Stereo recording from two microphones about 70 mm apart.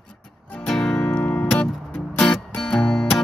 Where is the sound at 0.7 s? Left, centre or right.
Centre.